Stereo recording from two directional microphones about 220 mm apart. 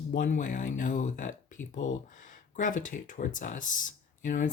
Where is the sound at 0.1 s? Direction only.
35° left (ahead or behind).